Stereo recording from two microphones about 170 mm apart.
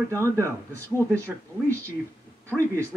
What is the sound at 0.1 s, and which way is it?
Speech, 15° right (ahead or behind).